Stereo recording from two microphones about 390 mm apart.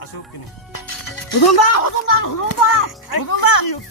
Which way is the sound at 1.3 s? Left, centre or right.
Left.